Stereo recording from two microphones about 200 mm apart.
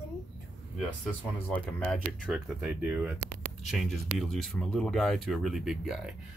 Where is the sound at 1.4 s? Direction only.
5° left (ahead or behind).